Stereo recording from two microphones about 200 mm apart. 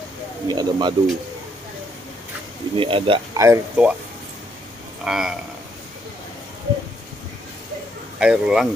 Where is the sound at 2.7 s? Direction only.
25° right (ahead or behind).